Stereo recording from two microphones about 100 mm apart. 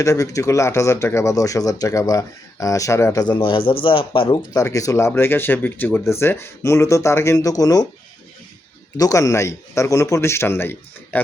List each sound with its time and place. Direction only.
0.0 s speech: 30° left (ahead or behind)
3.3 s speech: 60° left (ahead or behind)
4.5 s speech: 35° left (ahead or behind)
9.0 s speech: 35° left (ahead or behind)